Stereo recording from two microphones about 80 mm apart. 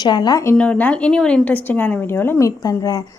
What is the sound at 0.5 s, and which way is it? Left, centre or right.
A woman's voice, centre.